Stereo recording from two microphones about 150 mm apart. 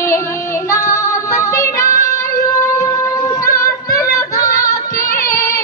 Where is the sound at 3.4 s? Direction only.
20° left (ahead or behind).